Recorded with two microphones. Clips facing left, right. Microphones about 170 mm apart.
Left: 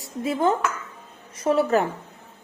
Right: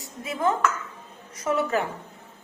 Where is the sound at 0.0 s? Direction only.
30° left (ahead or behind).